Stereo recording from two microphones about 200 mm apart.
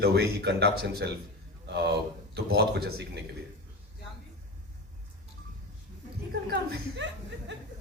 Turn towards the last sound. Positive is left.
turn(degrees=-65)  # may be behind; listen again after turning